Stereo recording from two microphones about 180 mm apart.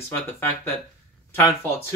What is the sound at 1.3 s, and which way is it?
Speech, 15° left (ahead or behind).